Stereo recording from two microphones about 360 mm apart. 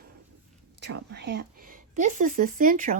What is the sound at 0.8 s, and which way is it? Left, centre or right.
Speech, right.